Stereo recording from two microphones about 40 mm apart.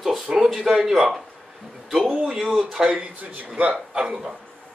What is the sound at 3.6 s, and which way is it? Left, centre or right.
Speech, centre.